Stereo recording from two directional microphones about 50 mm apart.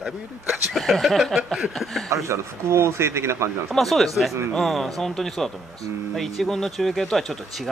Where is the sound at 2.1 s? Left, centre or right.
Right.